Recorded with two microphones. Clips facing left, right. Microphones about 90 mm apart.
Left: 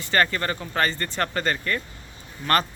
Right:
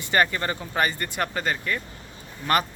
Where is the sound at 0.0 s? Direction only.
15° right (ahead or behind).